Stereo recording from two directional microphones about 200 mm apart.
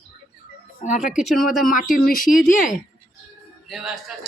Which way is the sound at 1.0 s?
Centre (ahead or behind).